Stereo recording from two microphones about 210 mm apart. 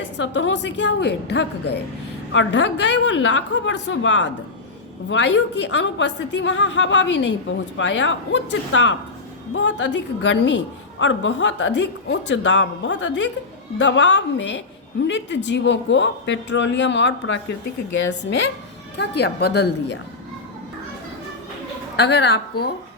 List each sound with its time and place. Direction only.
0.0 s a woman's voice: 60° left (ahead or behind)
18.9 s speech: 50° left (ahead or behind)
21.9 s speech: 55° left (ahead or behind)